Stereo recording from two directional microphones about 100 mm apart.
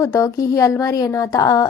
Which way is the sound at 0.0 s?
30° left (ahead or behind).